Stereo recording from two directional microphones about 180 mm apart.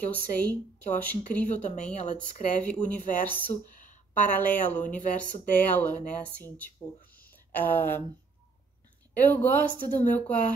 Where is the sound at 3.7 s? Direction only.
45° left (ahead or behind).